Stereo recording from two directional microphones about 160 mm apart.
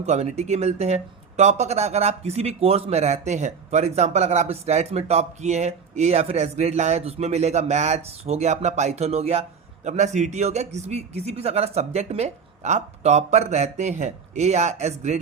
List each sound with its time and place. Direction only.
0.0 s speech: 45° right (ahead or behind)